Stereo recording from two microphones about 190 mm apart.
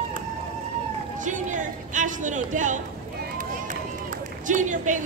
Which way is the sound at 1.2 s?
40° right (ahead or behind).